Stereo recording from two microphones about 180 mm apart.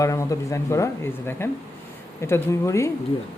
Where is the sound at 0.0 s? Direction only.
20° left (ahead or behind).